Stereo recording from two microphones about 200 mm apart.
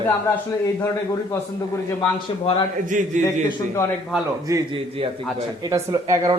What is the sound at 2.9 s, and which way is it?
Speech, 40° right (ahead or behind).